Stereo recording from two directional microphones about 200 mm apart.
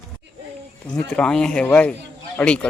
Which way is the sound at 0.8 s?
5° left (ahead or behind).